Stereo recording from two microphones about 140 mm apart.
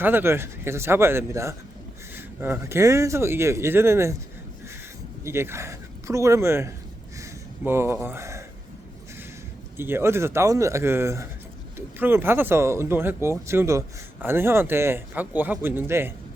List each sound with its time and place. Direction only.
0.0 s speech: 15° right (ahead or behind)
5.2 s speech: 20° right (ahead or behind)
7.2 s a sound: 15° right (ahead or behind)
8.0 s speech: 20° right (ahead or behind)
9.7 s speech: 15° right (ahead or behind)